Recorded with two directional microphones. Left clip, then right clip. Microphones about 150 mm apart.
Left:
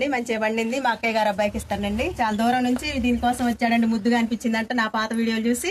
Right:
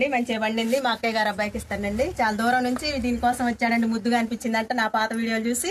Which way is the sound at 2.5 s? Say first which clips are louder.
Even; 50° left (ahead or behind).